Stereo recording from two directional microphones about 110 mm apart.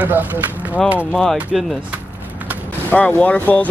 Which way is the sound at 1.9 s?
15° right (ahead or behind).